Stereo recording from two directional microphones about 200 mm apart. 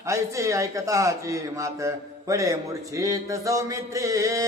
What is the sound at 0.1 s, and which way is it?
A man's voice, 15° right (ahead or behind).